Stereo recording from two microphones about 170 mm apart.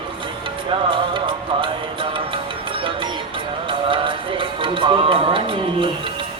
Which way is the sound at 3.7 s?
30° right (ahead or behind).